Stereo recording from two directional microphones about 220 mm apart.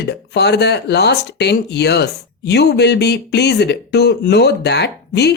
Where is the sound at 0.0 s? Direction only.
50° left (ahead or behind).